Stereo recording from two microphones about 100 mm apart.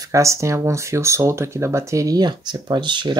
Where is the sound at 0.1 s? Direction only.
30° right (ahead or behind).